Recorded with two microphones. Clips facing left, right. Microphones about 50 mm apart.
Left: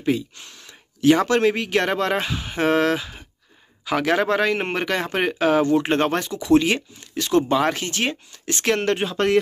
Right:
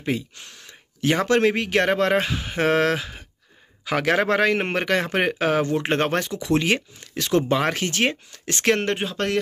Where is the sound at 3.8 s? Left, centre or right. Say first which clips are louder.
Left 1 dB; right.